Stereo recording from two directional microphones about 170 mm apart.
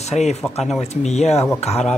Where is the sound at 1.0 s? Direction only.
40° left (ahead or behind).